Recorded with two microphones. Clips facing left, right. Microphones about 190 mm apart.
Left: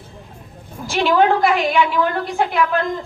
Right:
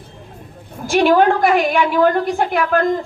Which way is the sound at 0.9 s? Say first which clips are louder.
Right 3 dB; 50° right (ahead or behind).